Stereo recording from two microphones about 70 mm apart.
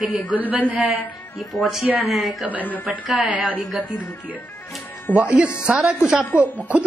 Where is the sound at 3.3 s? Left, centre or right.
Centre.